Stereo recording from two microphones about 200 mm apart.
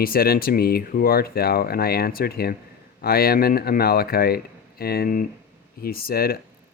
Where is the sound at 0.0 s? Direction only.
50° left (ahead or behind).